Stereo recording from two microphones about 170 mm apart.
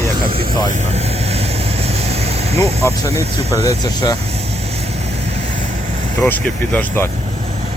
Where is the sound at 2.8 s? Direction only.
15° left (ahead or behind).